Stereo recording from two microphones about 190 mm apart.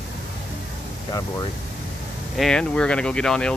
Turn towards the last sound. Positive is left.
turn(degrees=5)  # may be behind; listen again after turning